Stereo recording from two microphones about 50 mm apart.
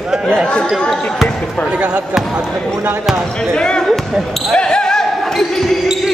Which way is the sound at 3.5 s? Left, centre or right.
Centre.